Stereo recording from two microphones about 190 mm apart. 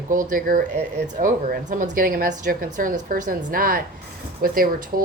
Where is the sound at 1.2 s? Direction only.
45° right (ahead or behind).